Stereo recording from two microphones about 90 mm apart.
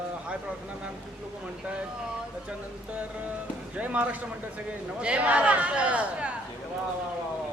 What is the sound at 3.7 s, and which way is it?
Speech, 15° right (ahead or behind).